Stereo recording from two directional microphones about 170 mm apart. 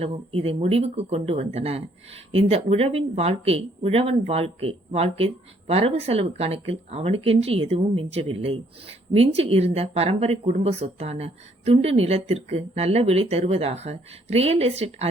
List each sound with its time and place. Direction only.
0.0 s speech: 35° right (ahead or behind)